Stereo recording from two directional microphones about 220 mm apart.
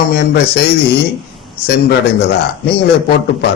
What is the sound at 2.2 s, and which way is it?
Speech, 50° left (ahead or behind).